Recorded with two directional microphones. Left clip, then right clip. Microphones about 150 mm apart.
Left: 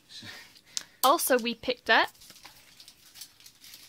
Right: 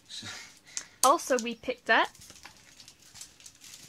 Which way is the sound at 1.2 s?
40° left (ahead or behind).